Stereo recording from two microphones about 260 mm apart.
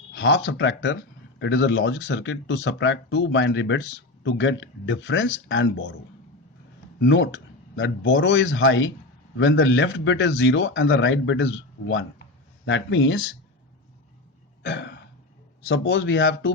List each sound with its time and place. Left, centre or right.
0.1 s a man's voice: left
7.0 s a man's voice: left
14.6 s throat clearing: left
15.7 s a man's voice: left